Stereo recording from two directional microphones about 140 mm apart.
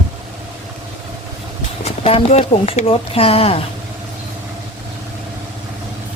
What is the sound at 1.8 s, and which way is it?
Speech, 45° left (ahead or behind).